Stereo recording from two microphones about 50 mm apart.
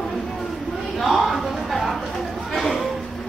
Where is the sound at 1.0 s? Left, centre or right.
Centre.